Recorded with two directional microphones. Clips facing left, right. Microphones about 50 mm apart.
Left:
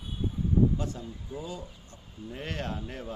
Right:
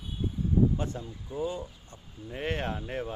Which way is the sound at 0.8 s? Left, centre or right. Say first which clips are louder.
Right 1 dB; right.